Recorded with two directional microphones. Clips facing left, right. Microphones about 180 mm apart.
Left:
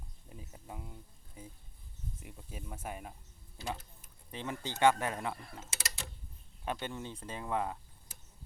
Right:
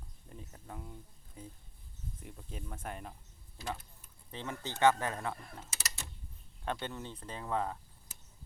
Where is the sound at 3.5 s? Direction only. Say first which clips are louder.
Left 1 dB; 20° left (ahead or behind).